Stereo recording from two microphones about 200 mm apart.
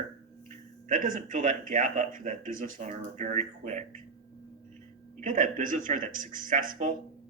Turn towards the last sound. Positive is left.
turn(degrees=-40)  # may be behind; listen again after turning